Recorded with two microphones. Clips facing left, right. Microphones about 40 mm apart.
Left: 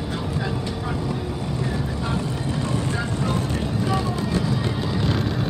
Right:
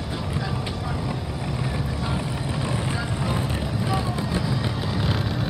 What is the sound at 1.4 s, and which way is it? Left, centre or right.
Vehicle, centre.